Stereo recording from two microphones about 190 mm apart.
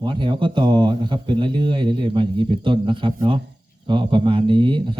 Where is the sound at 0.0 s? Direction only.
25° right (ahead or behind).